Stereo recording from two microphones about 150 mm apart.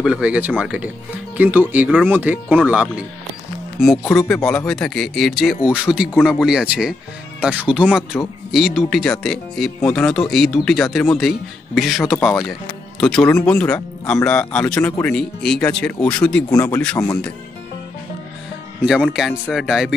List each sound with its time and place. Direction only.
0.0 s speech: 5° right (ahead or behind)
4.0 s speech: 15° left (ahead or behind)
4.5 s speech: 5° left (ahead or behind)
16.4 s speech: 20° left (ahead or behind)
18.9 s speech: centre (ahead or behind)